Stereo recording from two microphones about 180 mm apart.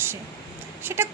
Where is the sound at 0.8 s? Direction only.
15° right (ahead or behind).